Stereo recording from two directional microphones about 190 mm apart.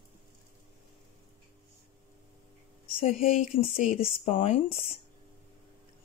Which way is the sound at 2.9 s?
35° left (ahead or behind).